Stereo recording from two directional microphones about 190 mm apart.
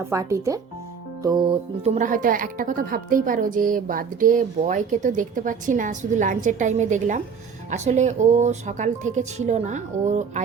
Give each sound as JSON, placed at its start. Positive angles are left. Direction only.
{"t": 0.1, "sound": "speech", "side_deg": -15}
{"t": 1.2, "sound": "music", "side_deg": -20}
{"t": 2.0, "sound": "a woman's voice", "side_deg": -45}